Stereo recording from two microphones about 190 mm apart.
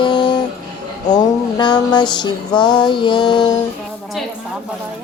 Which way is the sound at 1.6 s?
25° left (ahead or behind).